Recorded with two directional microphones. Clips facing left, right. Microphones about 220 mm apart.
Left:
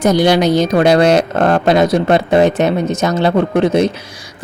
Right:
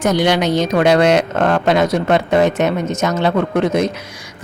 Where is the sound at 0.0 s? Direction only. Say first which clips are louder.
Left 4 dB; 35° left (ahead or behind).